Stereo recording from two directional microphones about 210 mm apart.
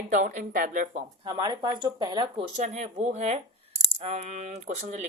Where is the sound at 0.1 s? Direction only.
40° right (ahead or behind).